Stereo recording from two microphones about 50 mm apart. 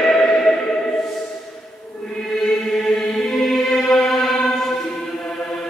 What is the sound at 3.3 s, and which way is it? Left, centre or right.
Music, centre.